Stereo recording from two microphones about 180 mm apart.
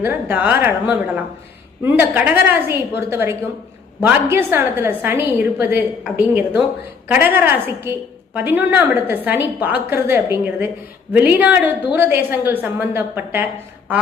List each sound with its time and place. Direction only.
0.0 s a woman's voice: 10° right (ahead or behind)